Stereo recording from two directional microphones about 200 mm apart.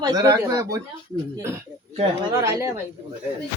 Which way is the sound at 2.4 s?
15° right (ahead or behind).